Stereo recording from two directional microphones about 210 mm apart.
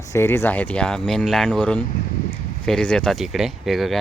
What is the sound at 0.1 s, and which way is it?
Speech, 10° left (ahead or behind).